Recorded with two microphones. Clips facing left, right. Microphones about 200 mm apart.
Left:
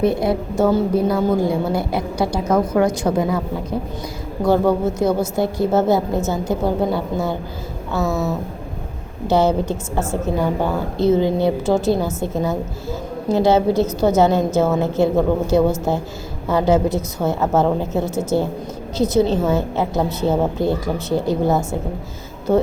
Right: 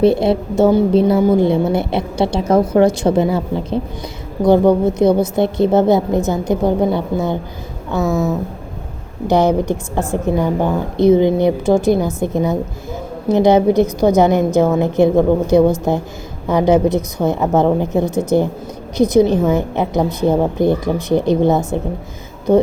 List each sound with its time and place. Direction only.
0.0 s a woman's voice: 30° right (ahead or behind)
8.0 s speech: centre (ahead or behind)
9.2 s a woman's voice: 15° right (ahead or behind)